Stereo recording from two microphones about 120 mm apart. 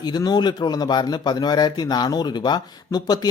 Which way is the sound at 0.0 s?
35° left (ahead or behind).